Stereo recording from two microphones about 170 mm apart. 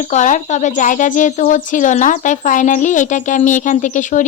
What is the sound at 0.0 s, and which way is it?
Speech, 45° left (ahead or behind).